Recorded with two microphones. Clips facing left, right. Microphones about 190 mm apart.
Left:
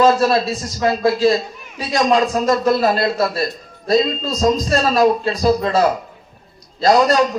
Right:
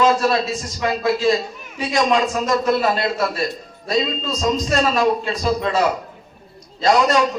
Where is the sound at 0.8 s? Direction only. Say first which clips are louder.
Left 4 dB; 35° left (ahead or behind).